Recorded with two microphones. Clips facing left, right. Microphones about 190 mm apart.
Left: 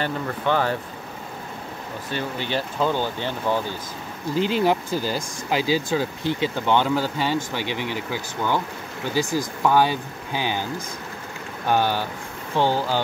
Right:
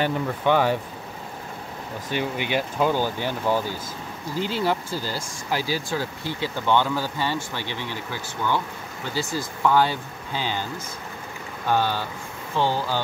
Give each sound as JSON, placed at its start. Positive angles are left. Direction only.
{"t": 0.0, "sound": "speech", "side_deg": -15}
{"t": 2.0, "sound": "speech", "side_deg": -15}
{"t": 4.4, "sound": "speech", "side_deg": 15}
{"t": 11.6, "sound": "speech", "side_deg": 15}